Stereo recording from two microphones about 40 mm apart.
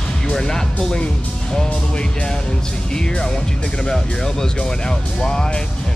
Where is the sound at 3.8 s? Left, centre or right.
Centre.